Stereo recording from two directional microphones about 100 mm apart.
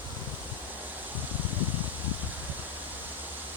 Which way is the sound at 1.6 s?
20° right (ahead or behind).